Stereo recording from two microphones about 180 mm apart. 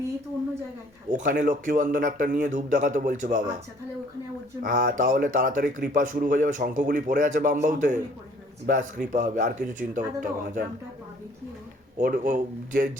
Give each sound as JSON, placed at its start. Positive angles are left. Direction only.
{"t": 1.1, "sound": "speech", "side_deg": -45}
{"t": 4.6, "sound": "speech", "side_deg": -50}
{"t": 11.9, "sound": "speech", "side_deg": -45}